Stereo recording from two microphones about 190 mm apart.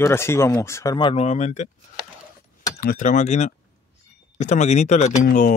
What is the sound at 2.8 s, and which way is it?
Speech, 45° left (ahead or behind).